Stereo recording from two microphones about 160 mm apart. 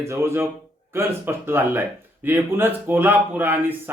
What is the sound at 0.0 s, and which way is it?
Speech, 15° right (ahead or behind).